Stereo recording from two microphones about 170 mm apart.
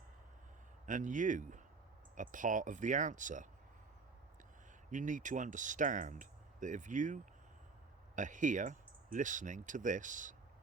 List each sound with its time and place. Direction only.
0.9 s speech: 50° right (ahead or behind)
4.9 s speech: 50° right (ahead or behind)